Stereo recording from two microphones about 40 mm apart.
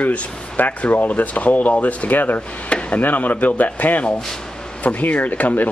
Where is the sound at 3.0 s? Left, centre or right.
Left.